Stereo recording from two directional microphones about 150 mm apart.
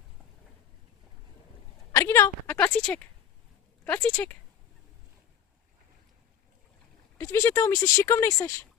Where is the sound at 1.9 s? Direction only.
20° left (ahead or behind).